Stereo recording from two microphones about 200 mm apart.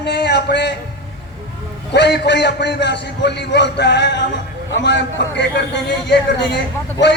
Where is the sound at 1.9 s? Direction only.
60° left (ahead or behind).